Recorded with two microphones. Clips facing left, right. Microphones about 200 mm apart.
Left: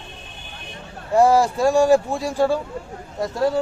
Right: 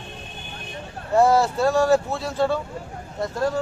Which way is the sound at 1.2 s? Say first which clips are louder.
Left 2 dB; 15° left (ahead or behind).